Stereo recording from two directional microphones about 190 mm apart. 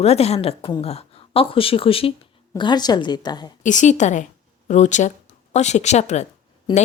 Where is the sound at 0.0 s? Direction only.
35° left (ahead or behind).